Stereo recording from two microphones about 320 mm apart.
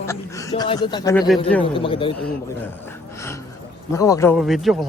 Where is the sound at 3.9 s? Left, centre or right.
Centre.